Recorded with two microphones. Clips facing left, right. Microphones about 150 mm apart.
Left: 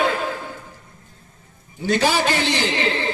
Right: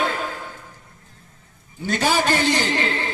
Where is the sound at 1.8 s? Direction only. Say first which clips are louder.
Left 2 dB; 45° right (ahead or behind).